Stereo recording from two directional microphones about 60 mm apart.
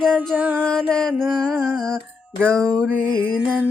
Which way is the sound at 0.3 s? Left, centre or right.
Right.